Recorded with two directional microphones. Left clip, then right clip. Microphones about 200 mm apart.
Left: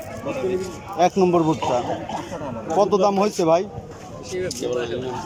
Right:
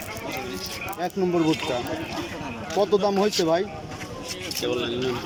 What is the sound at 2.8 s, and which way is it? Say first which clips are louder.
Speech: left 3 dB; 10° left (ahead or behind).